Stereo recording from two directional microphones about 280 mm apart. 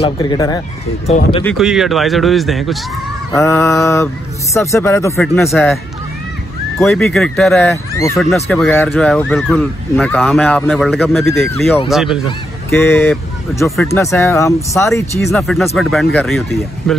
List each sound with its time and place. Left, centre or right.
0.0 s speech: centre
1.4 s speech: centre
6.8 s speech: centre
12.3 s speech: centre